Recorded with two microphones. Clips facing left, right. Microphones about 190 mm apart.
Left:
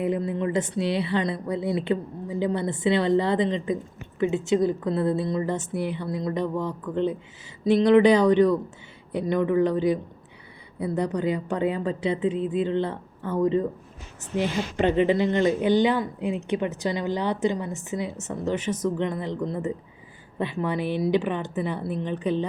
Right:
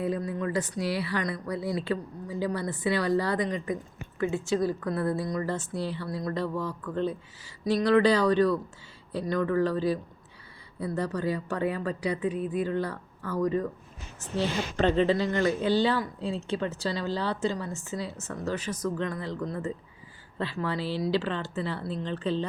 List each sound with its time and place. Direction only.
0.0 s speech: 25° left (ahead or behind)